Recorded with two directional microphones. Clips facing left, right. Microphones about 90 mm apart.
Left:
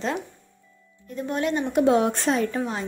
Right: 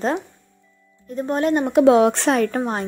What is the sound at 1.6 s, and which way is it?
Speech, 90° right.